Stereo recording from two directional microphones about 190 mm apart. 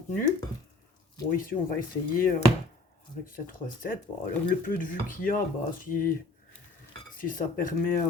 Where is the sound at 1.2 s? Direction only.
45° left (ahead or behind).